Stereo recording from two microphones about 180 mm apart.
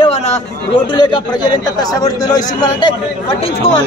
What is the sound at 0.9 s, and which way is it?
A man's voice, 25° left (ahead or behind).